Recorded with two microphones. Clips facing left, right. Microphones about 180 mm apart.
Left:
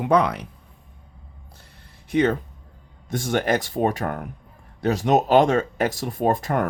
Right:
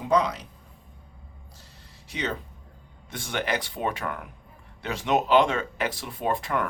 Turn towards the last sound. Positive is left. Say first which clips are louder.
# left 6 dB
turn(degrees=45)  # may be behind; listen again after turning